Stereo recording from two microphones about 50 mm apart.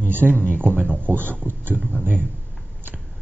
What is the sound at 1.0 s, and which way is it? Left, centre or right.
Speech, right.